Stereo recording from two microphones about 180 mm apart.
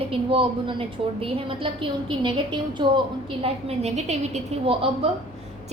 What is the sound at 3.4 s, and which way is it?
Speech, 35° right (ahead or behind).